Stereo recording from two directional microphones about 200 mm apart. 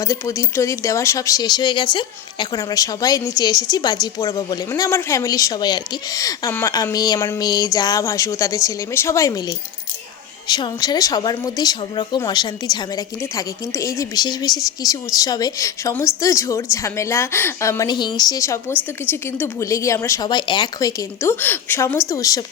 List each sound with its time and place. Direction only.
0.0 s a woman's voice: 15° left (ahead or behind)